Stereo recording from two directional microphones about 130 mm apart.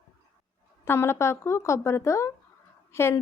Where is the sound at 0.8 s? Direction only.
20° left (ahead or behind).